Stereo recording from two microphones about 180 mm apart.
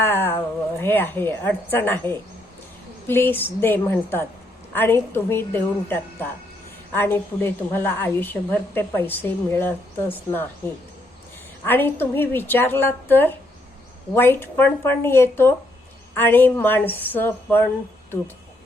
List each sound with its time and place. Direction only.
0.0 s a woman's voice: 15° left (ahead or behind)